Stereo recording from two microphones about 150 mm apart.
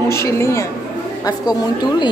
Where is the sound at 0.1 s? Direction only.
20° left (ahead or behind).